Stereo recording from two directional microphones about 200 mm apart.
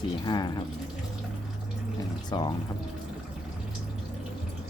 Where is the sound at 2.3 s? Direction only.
20° left (ahead or behind).